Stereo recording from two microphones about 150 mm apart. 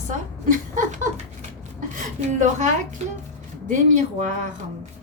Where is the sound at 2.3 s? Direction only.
55° right (ahead or behind).